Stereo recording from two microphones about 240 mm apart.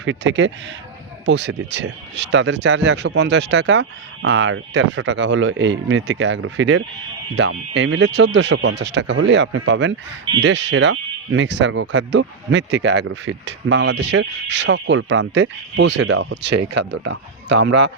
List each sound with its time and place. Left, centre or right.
0.0 s speech: right
16.0 s speech: right
17.7 s a man's voice: right